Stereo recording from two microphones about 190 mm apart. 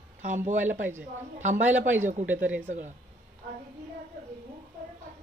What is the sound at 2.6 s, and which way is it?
Speech, 40° right (ahead or behind).